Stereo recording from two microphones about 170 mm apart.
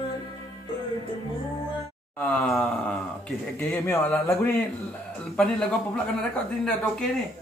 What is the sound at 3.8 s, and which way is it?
Speech, 15° left (ahead or behind).